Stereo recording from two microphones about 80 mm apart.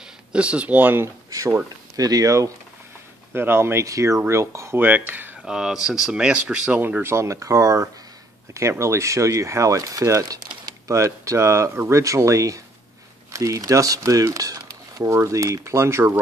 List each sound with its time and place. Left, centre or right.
0.3 s speech: centre
1.0 s speech: right
2.0 s speech: right
3.3 s speech: right
3.8 s speech: right
4.7 s speech: right
5.4 s speech: centre
7.0 s speech: right